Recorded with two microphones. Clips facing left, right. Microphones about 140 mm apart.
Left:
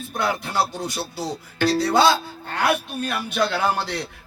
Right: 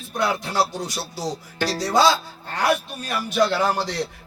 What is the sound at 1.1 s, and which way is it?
Speech, 60° left (ahead or behind).